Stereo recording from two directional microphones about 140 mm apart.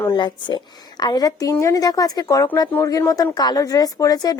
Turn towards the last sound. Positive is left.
turn(degrees=25)  # may be behind; listen again after turning